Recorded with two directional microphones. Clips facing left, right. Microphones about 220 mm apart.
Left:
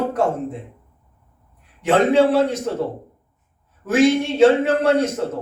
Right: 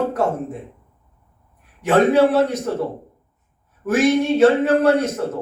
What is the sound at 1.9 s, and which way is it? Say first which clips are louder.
Speech: right 1 dB; 30° left (ahead or behind).